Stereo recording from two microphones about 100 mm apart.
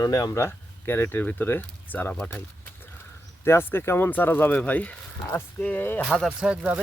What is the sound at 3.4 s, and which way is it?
Speech, 25° left (ahead or behind).